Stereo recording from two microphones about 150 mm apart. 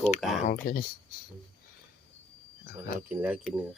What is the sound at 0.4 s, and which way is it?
Speech, 70° left (ahead or behind).